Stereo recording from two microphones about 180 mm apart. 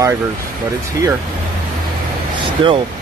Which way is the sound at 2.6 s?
30° right (ahead or behind).